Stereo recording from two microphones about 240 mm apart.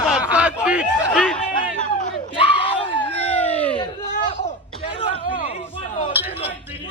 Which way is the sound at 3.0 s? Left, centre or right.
Centre.